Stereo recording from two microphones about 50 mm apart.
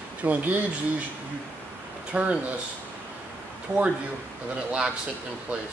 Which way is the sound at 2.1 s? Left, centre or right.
Right.